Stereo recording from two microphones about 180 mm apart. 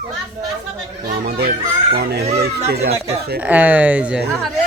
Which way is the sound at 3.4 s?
10° right (ahead or behind).